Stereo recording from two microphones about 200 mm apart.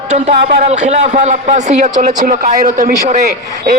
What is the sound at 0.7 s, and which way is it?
A man's voice, 35° right (ahead or behind).